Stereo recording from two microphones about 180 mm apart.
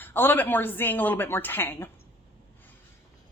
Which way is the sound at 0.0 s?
10° left (ahead or behind).